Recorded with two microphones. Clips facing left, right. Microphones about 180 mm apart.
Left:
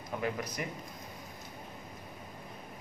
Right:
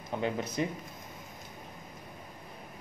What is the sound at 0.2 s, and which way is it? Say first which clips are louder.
Speech: right 5 dB; 25° right (ahead or behind).